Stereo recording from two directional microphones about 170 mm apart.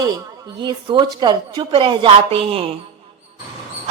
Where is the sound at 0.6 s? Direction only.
25° right (ahead or behind).